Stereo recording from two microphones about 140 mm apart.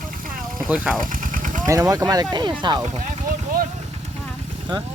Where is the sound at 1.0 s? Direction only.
75° right (ahead or behind).